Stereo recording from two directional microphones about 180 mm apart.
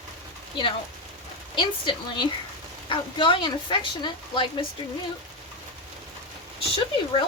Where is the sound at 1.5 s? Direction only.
25° left (ahead or behind).